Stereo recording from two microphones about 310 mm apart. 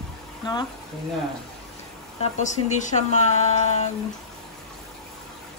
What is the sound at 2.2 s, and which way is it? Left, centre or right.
Speech, left.